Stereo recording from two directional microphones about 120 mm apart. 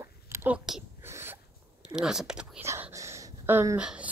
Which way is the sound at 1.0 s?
20° right (ahead or behind).